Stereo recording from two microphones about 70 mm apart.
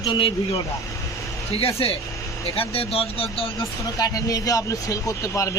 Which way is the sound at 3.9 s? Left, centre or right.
Left.